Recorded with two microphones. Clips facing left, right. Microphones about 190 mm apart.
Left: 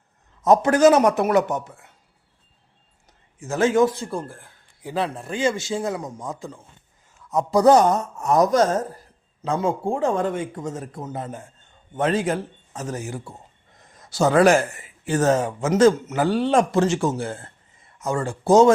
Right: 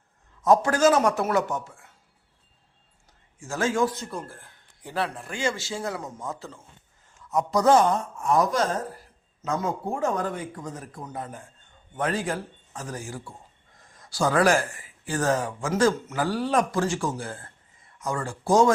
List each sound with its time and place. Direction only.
0.4 s speech: 20° left (ahead or behind)
3.3 s speech: 20° left (ahead or behind)
4.3 s a man's voice: 15° left (ahead or behind)
7.5 s speech: 35° left (ahead or behind)
9.4 s speech: 30° left (ahead or behind)